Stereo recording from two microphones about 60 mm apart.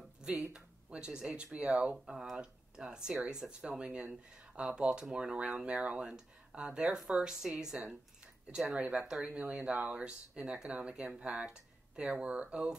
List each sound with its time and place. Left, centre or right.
0.4 s speech: right
2.0 s speech: centre
9.3 s speech: right